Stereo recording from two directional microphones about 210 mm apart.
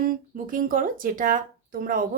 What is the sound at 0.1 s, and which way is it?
Speech, 40° right (ahead or behind).